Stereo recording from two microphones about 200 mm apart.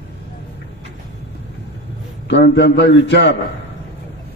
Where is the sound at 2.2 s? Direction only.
60° left (ahead or behind).